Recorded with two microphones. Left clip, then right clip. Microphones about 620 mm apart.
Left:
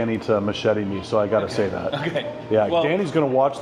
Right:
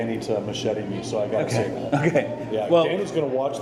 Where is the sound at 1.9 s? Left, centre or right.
Right.